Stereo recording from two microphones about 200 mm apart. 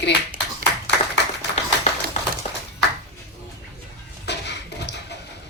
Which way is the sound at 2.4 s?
35° left (ahead or behind).